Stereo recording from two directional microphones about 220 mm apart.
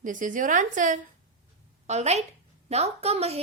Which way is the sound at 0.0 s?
35° right (ahead or behind).